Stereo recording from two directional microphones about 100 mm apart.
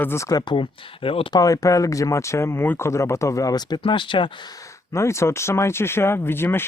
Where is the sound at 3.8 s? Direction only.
55° left (ahead or behind).